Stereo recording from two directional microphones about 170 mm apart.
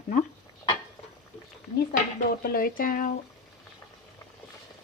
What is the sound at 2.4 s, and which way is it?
Speech, 60° left (ahead or behind).